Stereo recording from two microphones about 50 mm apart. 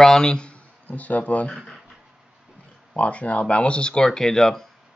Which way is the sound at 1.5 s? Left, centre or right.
Centre.